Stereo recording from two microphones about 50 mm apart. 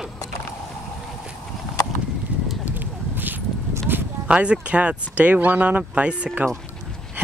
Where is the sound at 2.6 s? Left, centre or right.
Right.